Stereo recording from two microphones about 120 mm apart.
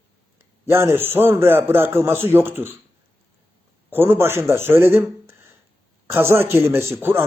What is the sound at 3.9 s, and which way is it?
A man's voice, 20° right (ahead or behind).